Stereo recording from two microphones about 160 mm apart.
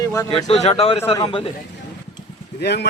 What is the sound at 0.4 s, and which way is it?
Speech, 40° left (ahead or behind).